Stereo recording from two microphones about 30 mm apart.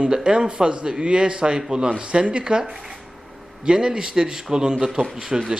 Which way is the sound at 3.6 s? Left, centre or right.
Right.